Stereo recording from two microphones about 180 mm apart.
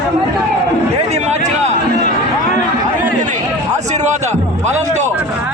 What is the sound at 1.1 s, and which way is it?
Speech, 40° right (ahead or behind).